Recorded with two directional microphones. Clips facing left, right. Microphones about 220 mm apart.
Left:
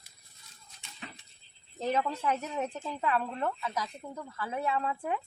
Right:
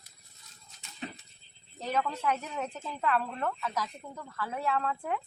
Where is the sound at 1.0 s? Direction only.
25° right (ahead or behind).